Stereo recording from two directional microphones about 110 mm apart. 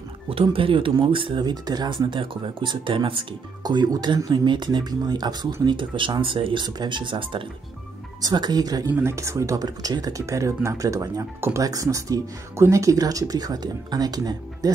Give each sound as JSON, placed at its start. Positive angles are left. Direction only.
{"t": 0.3, "sound": "speech", "side_deg": -55}
{"t": 1.4, "sound": "speech", "side_deg": -40}
{"t": 3.6, "sound": "speech", "side_deg": -40}
{"t": 8.2, "sound": "speech", "side_deg": -40}